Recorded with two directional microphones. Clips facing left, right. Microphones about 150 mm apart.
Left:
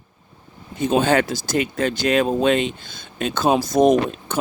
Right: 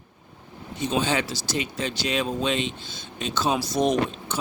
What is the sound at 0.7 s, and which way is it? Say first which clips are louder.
Speech: left 7 dB; 50° left (ahead or behind).